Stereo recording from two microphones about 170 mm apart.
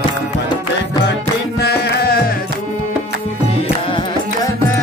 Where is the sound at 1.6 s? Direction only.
70° left (ahead or behind).